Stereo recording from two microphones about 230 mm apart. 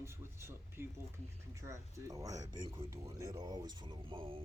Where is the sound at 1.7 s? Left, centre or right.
Centre.